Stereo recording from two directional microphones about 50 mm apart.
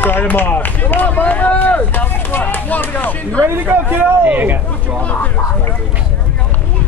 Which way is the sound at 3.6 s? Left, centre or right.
Right.